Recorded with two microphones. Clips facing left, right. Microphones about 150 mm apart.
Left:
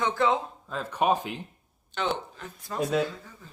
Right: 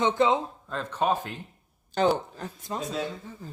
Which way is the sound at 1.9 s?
40° right (ahead or behind).